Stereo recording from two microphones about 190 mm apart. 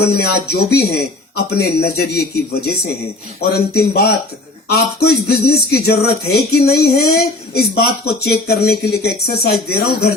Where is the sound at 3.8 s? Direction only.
55° left (ahead or behind).